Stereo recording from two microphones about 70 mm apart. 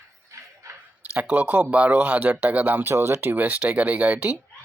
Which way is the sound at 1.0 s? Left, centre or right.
Right.